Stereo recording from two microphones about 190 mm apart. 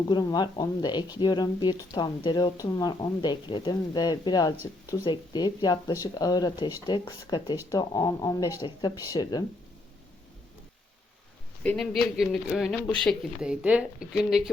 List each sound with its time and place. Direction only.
0.1 s speech: 20° left (ahead or behind)
11.6 s speech: 5° left (ahead or behind)